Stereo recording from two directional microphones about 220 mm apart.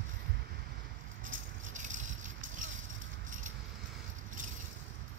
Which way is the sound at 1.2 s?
35° right (ahead or behind).